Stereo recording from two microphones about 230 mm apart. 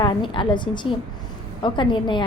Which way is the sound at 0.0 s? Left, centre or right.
Left.